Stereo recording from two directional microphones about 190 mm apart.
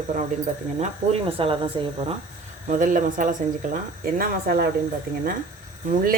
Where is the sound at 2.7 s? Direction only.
45° right (ahead or behind).